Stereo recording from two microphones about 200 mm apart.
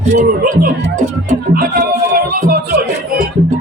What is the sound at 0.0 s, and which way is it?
Speech, 35° right (ahead or behind).